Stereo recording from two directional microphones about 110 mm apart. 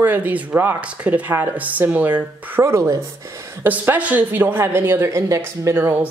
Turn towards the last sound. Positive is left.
turn(degrees=-20)  # may be behind; listen again after turning